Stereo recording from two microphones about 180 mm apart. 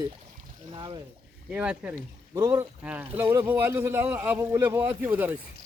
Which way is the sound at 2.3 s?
20° right (ahead or behind).